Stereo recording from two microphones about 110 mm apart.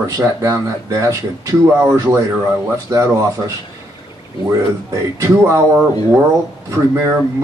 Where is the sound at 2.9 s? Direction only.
30° right (ahead or behind).